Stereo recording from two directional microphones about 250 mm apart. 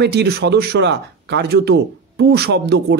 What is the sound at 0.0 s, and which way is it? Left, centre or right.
Speech, right.